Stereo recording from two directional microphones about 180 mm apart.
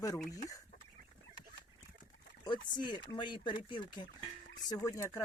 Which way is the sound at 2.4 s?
25° left (ahead or behind).